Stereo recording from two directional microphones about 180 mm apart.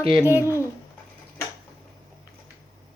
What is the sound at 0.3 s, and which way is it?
Speech, 10° right (ahead or behind).